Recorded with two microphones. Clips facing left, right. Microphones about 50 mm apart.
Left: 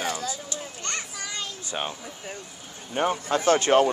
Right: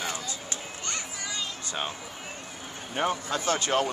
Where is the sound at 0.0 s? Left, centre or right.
Left.